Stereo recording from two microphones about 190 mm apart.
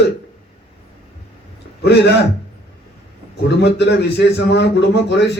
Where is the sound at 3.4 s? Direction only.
65° left (ahead or behind).